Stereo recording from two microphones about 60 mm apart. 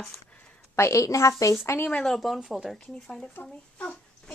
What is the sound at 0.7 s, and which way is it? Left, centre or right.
Speech, left.